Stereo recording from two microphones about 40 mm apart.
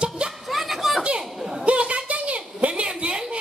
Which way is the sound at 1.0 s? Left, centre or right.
Right.